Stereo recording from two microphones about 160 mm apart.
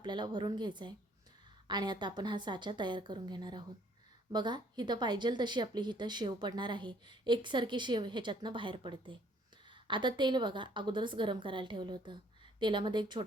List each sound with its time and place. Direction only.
0.0 s speech: 25° right (ahead or behind)